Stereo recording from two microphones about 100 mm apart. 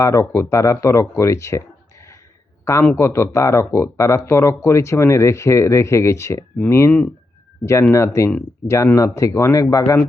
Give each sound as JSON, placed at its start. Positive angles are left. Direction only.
{"t": 0.0, "sound": "speech", "side_deg": 30}
{"t": 2.8, "sound": "speech", "side_deg": 25}